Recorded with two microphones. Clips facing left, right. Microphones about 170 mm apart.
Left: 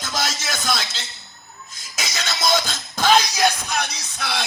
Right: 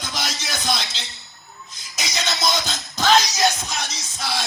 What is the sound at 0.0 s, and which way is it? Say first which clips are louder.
Music: left 3 dB; 50° left (ahead or behind).